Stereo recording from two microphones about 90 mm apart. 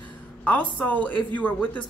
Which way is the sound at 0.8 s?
15° left (ahead or behind).